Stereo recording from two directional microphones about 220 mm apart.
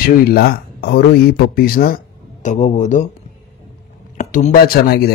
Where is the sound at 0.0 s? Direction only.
45° left (ahead or behind).